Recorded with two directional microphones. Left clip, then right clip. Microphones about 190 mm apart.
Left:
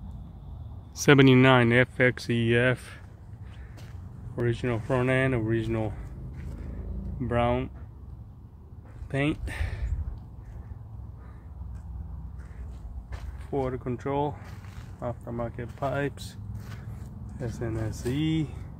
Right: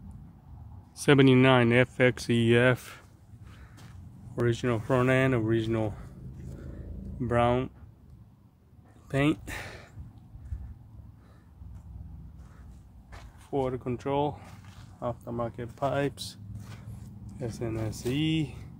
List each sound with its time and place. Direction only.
0.9 s speech: centre (ahead or behind); by 3.0 s 25° right (ahead or behind)
4.5 s speech: 30° right (ahead or behind)
7.2 s speech: 30° right (ahead or behind)
9.1 s speech: 30° right (ahead or behind)
13.7 s speech: 10° right (ahead or behind)